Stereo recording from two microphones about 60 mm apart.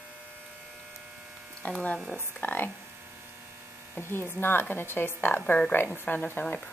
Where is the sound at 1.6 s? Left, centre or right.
Left.